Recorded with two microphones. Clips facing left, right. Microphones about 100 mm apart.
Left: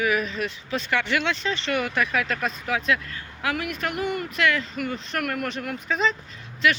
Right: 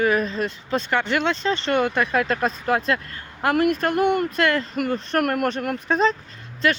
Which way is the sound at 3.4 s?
50° right (ahead or behind).